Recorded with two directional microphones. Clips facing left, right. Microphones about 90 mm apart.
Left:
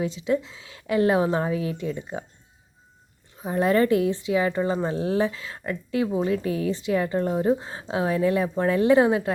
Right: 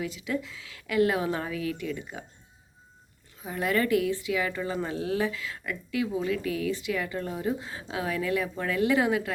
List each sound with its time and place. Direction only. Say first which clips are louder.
0.0 s a woman's voice: left 7 dB; 25° left (ahead or behind)
3.3 s speech: left 7 dB; 30° left (ahead or behind)